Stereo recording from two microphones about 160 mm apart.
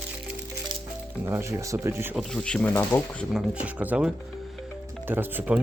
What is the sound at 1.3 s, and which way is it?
Speech, 15° right (ahead or behind).